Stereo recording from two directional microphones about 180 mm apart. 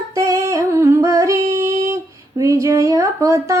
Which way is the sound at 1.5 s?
15° right (ahead or behind).